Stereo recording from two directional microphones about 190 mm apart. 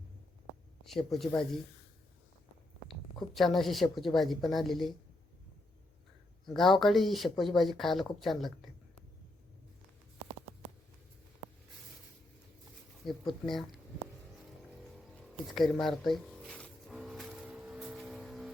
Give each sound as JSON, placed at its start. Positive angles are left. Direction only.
{"t": 0.9, "sound": "speech", "side_deg": 0}
{"t": 3.3, "sound": "speech", "side_deg": 0}
{"t": 6.4, "sound": "speech", "side_deg": 0}
{"t": 13.1, "sound": "speech", "side_deg": 0}
{"t": 14.9, "sound": "a sound", "side_deg": 0}